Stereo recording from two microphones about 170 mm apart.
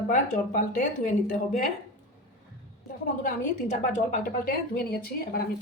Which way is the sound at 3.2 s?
45° left (ahead or behind).